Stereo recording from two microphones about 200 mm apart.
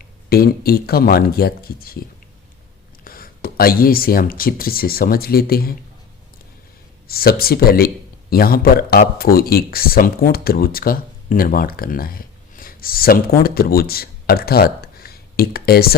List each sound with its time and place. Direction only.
0.0 s speech: 50° left (ahead or behind)
3.0 s speech: 45° left (ahead or behind)
7.1 s speech: 50° left (ahead or behind)